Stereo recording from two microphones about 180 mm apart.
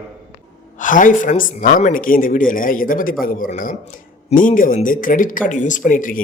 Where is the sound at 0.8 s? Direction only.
45° left (ahead or behind).